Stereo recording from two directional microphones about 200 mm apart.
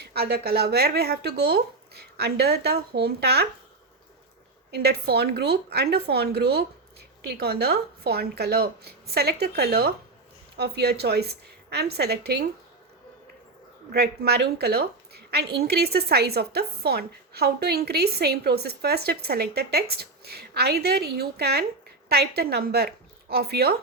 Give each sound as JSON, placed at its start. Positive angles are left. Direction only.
{"t": 0.0, "sound": "a woman's voice", "side_deg": -50}
{"t": 4.7, "sound": "a woman's voice", "side_deg": -55}
{"t": 13.9, "sound": "a woman's voice", "side_deg": -55}